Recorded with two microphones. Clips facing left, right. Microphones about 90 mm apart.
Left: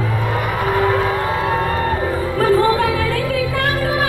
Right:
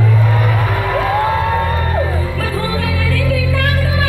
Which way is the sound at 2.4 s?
35° left (ahead or behind).